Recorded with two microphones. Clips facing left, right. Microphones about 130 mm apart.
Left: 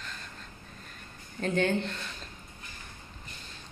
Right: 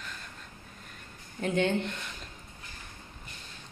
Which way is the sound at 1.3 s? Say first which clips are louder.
Even; 15° right (ahead or behind).